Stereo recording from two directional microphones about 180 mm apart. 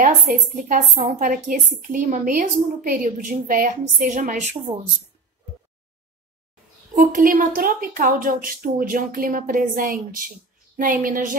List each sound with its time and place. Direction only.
0.0 s a woman's voice: 45° right (ahead or behind)
7.0 s a woman's voice: 45° right (ahead or behind)